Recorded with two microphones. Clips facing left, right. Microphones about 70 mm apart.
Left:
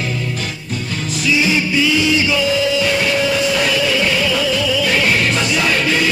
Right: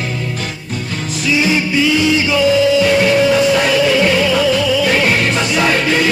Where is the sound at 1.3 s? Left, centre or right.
Right.